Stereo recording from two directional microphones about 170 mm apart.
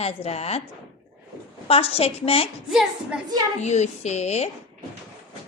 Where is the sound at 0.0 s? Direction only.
35° left (ahead or behind).